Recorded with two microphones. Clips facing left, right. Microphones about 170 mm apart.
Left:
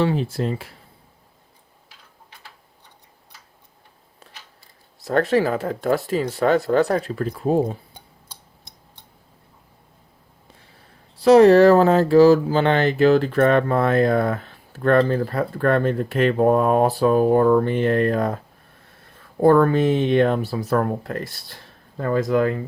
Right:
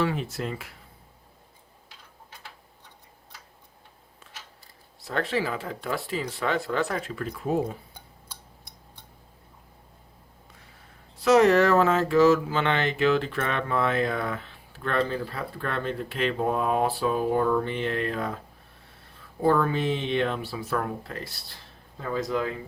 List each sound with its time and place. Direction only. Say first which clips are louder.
0.0 s speech: left 6 dB; 30° left (ahead or behind)
5.0 s speech: left 9 dB; 45° left (ahead or behind)
7.9 s a sound: left 1 dB; 20° left (ahead or behind)
11.2 s speech: left 8 dB; 35° left (ahead or behind); by 22.6 s 55° left (ahead or behind)